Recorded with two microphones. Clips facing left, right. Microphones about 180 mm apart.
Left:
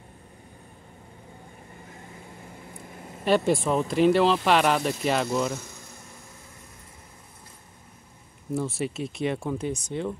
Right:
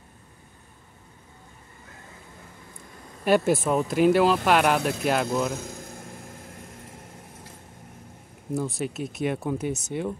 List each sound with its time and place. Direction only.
3.3 s speech: 5° right (ahead or behind)
5.8 s vehicle: 55° right (ahead or behind)
8.5 s speech: centre (ahead or behind)